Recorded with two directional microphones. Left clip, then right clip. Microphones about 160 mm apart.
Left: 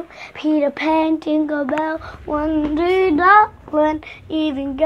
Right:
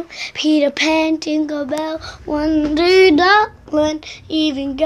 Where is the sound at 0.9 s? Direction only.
Centre (ahead or behind).